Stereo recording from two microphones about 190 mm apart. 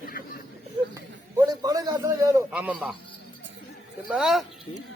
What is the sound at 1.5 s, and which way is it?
Speech, 20° right (ahead or behind).